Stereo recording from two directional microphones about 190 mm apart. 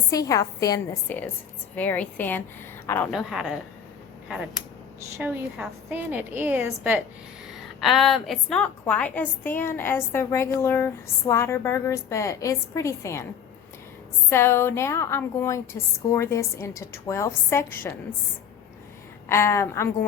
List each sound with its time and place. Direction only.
0.1 s a woman's voice: 20° left (ahead or behind)
3.1 s a woman's voice: centre (ahead or behind)
5.1 s a woman's voice: 10° right (ahead or behind); by 13.2 s 15° left (ahead or behind)
14.3 s a woman's voice: 15° left (ahead or behind)
19.3 s a woman's voice: 15° left (ahead or behind)